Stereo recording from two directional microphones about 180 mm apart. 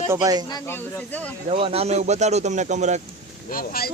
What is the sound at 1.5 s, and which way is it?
Speech, 30° right (ahead or behind).